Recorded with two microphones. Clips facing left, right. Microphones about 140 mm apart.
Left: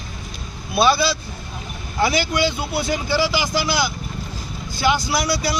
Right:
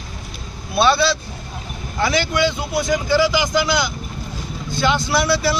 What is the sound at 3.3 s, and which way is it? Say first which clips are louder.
Speech: right 3 dB; 20° right (ahead or behind).